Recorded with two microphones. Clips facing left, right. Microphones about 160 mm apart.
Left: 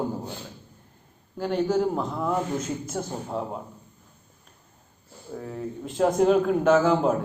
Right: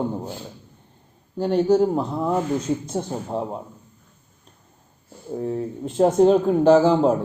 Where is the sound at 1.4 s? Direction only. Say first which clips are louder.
Right 6 dB; 40° right (ahead or behind).